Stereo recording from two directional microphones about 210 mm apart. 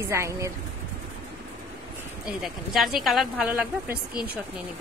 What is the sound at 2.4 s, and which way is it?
A woman's voice, centre (ahead or behind).